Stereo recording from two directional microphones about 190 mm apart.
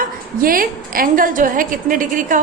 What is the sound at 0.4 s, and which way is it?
A woman's voice, 50° right (ahead or behind).